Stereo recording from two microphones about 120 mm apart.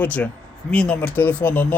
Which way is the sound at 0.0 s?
10° left (ahead or behind).